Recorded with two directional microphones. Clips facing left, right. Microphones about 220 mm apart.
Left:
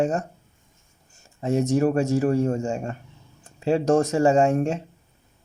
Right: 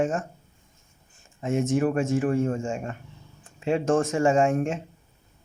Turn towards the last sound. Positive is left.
turn(degrees=35)  # may be behind; listen again after turning